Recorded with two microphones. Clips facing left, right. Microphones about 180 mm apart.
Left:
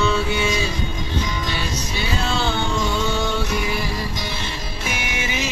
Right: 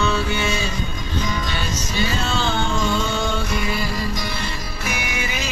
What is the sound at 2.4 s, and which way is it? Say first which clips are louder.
Music: even; 15° left (ahead or behind).